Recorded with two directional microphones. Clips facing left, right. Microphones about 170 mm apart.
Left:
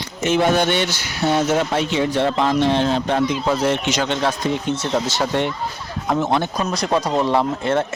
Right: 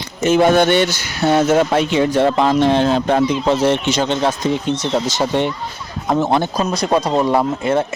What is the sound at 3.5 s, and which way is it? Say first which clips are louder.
Speech: right 4 dB; 25° right (ahead or behind).